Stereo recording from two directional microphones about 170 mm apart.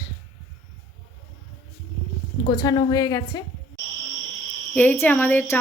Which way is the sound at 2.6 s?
25° left (ahead or behind).